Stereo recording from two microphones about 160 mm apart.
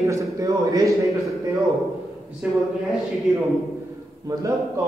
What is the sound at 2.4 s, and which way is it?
Speech, 10° right (ahead or behind).